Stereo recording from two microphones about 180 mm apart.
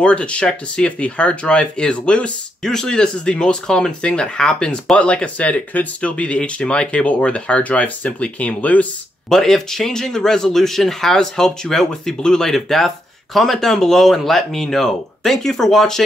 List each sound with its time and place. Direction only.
0.0 s speech: 5° left (ahead or behind)